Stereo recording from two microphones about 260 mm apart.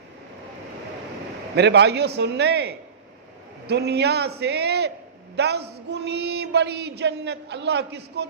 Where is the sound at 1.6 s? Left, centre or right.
Right.